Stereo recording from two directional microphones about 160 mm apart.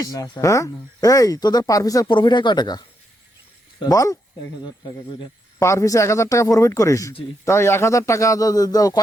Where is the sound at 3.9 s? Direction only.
20° left (ahead or behind).